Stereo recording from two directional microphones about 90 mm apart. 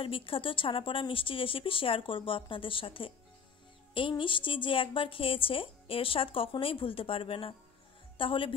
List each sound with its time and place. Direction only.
0.0 s speech: 80° left
4.1 s speech: 70° left (ahead or behind); by 7.5 s 90° left
8.2 s speech: 75° left (ahead or behind)